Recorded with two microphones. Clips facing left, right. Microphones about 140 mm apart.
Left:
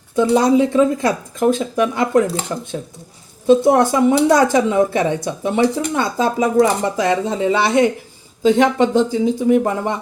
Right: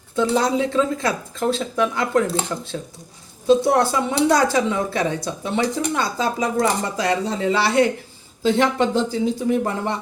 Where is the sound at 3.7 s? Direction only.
15° left (ahead or behind).